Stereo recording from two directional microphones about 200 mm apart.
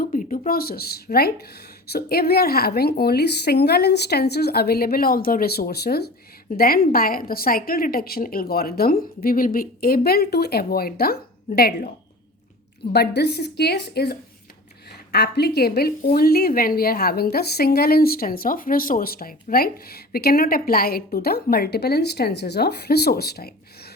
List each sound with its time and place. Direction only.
0.0 s a woman's voice: 40° left (ahead or behind)